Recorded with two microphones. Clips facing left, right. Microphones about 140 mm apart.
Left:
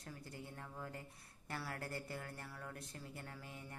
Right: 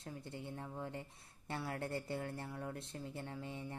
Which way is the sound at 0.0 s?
25° right (ahead or behind).